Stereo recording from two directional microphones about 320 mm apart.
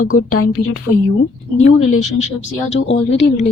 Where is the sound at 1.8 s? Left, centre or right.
Left.